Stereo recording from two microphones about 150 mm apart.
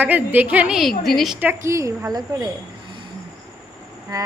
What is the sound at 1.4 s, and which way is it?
Speech, 15° right (ahead or behind).